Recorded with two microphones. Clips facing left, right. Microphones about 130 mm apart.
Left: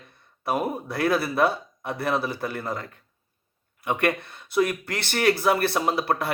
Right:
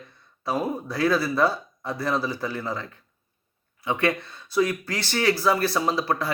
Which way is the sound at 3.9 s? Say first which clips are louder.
Even; 60° left (ahead or behind).